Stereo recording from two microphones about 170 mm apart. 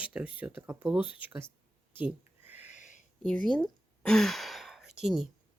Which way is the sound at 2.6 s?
45° left (ahead or behind).